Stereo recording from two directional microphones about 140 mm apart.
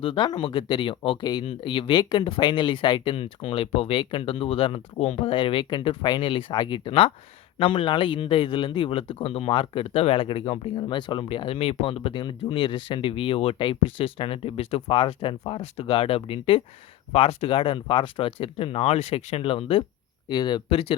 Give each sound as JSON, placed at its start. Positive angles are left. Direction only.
{"t": 0.0, "sound": "speech", "side_deg": 35}